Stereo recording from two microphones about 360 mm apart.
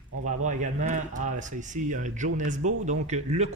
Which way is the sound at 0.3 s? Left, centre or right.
Centre.